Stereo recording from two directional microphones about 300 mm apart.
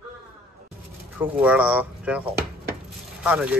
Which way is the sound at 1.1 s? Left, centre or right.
Centre.